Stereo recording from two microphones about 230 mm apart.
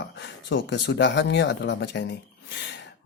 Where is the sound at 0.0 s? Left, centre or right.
Left.